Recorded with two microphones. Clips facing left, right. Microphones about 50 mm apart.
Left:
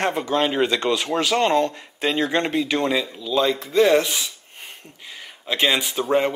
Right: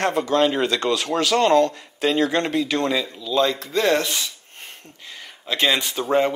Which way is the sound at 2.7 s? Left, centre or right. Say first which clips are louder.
Even; centre.